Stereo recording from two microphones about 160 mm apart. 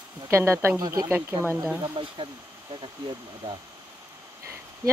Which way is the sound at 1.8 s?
30° right (ahead or behind).